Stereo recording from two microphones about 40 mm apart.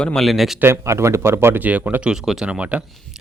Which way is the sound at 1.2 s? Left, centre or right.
Right.